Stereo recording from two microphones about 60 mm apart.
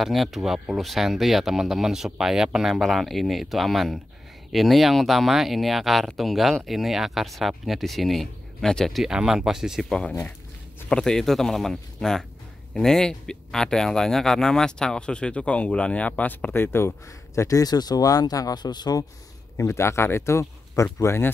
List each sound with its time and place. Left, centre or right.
0.0 s speech: centre
9.0 s speech: centre
10.9 s speech: centre; by 16.9 s left
17.4 s speech: left
19.5 s speech: left